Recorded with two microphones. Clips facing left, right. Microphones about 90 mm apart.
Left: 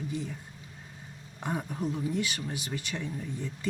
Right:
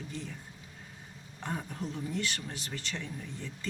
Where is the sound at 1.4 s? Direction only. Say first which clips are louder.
Left 5 dB; 10° left (ahead or behind).